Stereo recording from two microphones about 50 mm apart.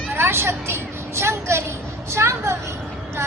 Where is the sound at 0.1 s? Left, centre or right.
Right.